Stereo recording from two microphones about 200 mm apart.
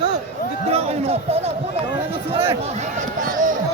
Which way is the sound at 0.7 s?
30° right (ahead or behind).